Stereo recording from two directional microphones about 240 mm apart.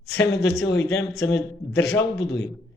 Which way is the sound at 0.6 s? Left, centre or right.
Left.